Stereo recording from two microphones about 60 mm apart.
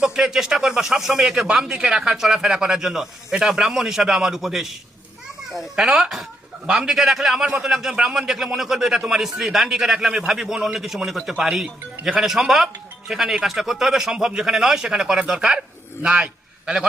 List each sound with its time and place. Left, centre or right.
0.0 s a man's voice: centre